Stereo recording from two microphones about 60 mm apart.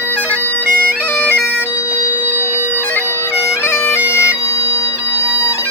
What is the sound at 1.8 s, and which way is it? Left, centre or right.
Bagpipes, right.